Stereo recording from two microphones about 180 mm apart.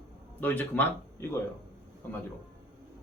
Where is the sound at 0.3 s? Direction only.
10° left (ahead or behind).